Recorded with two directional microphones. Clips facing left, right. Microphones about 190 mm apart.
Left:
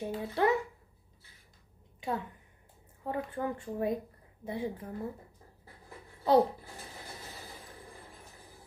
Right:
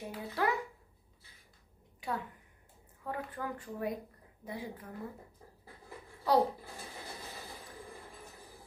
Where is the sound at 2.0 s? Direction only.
25° left (ahead or behind).